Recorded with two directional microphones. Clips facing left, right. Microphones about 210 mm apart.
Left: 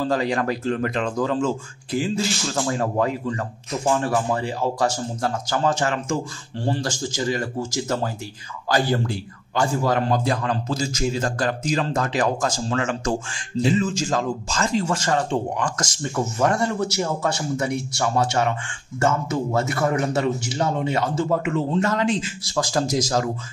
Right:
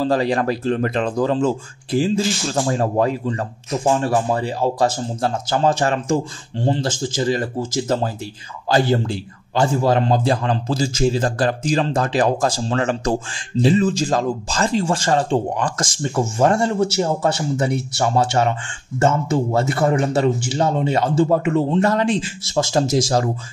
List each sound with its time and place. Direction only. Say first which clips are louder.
0.0 s a man's voice: right 4 dB; 35° right (ahead or behind)